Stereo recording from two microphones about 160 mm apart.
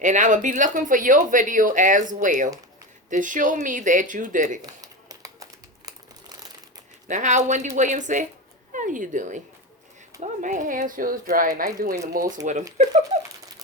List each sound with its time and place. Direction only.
0.0 s speech: 50° right (ahead or behind)
4.6 s crumpling: 20° right (ahead or behind)
7.1 s speech: 50° right (ahead or behind); by 12.2 s 65° right (ahead or behind)
12.4 s speech: 50° right (ahead or behind)